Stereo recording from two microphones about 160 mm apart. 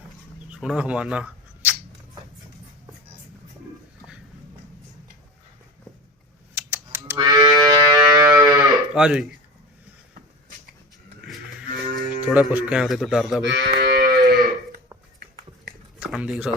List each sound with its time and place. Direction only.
0.5 s speech: 5° right (ahead or behind)
6.6 s computer keyboard: 15° right (ahead or behind)
7.2 s music: 25° right (ahead or behind)
8.4 s livestock: 20° right (ahead or behind)
9.0 s speech: 5° right (ahead or behind)
11.9 s speech: 10° right (ahead or behind)
13.5 s moo: 90° right
13.9 s moo: 60° right (ahead or behind)
16.0 s a sound: 5° right (ahead or behind)